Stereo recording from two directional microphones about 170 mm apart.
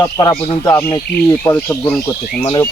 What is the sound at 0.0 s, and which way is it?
Speech, 20° left (ahead or behind).